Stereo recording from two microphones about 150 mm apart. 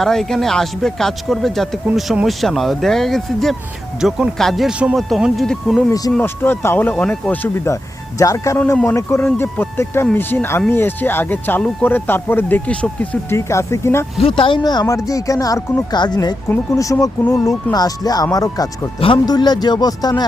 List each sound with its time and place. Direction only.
0.0 s speech: centre (ahead or behind)
6.1 s speech: 15° left (ahead or behind)
14.2 s speech: 35° left (ahead or behind)
18.9 s speech: 35° left (ahead or behind)